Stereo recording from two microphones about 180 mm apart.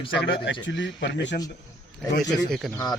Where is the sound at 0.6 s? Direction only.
90° left.